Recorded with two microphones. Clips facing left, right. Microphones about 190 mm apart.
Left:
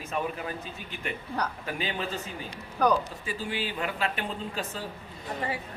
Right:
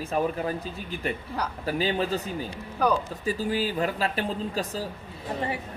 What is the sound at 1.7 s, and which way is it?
Speech, 35° right (ahead or behind).